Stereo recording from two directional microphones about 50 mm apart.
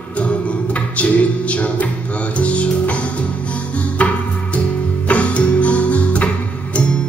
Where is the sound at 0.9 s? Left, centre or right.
Left.